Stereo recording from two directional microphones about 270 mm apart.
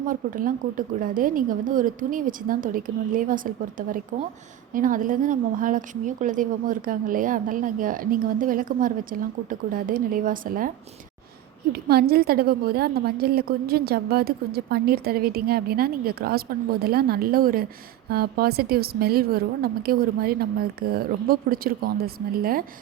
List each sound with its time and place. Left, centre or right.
0.1 s a woman's voice: right
11.7 s a woman's voice: right